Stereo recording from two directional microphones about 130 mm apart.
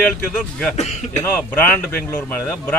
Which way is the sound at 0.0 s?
10° left (ahead or behind).